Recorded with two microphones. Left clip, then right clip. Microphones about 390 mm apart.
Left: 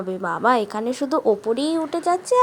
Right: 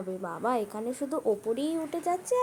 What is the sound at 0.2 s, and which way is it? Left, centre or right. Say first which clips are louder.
A woman's voice: left 11 dB; right.